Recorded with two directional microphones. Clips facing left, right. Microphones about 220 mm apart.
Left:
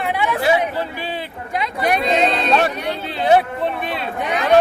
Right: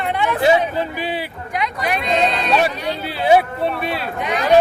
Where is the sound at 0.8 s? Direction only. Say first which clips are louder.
Right 2 dB; 15° right (ahead or behind).